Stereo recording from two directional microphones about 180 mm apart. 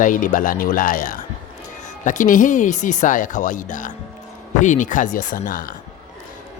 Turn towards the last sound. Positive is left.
turn(degrees=50)  # may be behind; listen again after turning